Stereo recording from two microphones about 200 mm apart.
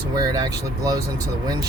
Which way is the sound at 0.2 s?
20° right (ahead or behind).